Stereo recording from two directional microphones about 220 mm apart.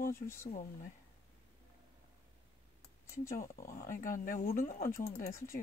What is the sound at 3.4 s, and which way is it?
Speech, 40° left (ahead or behind).